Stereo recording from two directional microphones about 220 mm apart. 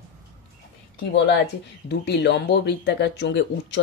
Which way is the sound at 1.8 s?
50° left (ahead or behind).